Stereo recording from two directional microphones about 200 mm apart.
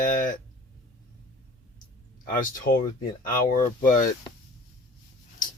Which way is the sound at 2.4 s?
45° left (ahead or behind).